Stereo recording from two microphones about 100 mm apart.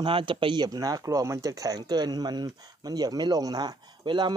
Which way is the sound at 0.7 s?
40° right (ahead or behind).